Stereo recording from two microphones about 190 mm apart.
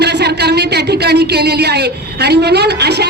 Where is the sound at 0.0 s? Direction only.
60° right (ahead or behind).